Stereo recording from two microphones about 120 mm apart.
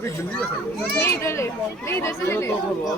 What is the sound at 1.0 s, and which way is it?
A child's voice, 25° left (ahead or behind).